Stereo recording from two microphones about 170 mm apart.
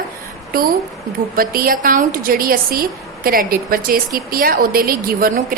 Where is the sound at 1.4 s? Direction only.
60° right (ahead or behind).